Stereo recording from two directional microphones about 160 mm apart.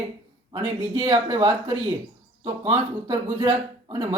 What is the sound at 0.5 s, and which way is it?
Speech, 20° right (ahead or behind).